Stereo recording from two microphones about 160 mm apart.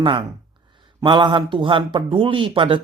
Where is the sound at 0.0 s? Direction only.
30° right (ahead or behind).